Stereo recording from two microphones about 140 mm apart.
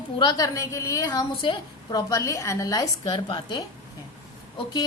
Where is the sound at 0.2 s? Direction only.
30° left (ahead or behind).